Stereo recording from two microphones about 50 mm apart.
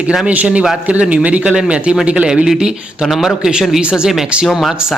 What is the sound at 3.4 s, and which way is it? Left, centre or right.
Speech, centre.